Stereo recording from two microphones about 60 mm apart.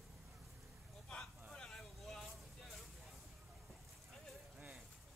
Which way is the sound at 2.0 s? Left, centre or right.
Centre.